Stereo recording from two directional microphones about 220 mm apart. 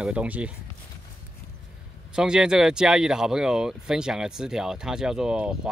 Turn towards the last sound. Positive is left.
turn(degrees=-5)  # may be behind; listen again after turning